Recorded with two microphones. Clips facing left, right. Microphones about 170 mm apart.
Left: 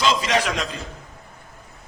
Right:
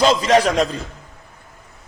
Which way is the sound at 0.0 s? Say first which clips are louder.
Right 7 dB; 40° right (ahead or behind).